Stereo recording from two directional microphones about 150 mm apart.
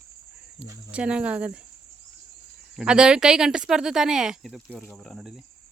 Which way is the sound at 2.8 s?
5° right (ahead or behind).